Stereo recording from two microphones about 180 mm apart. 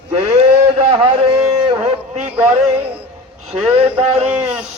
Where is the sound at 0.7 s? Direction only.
30° right (ahead or behind).